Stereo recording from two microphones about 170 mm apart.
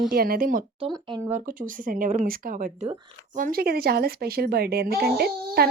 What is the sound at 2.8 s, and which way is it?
Speech, 25° right (ahead or behind).